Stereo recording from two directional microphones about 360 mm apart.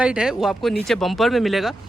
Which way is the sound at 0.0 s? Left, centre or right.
Centre.